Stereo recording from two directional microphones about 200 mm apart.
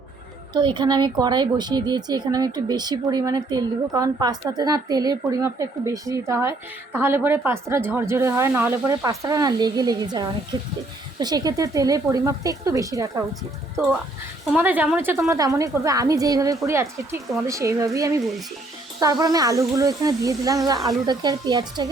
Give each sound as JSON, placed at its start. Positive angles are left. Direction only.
{"t": 0.5, "sound": "a woman's voice", "side_deg": -25}
{"t": 14.5, "sound": "speech", "side_deg": -10}
{"t": 19.2, "sound": "a woman's voice", "side_deg": -20}